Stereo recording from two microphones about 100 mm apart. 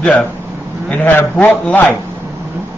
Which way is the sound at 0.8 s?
15° left (ahead or behind).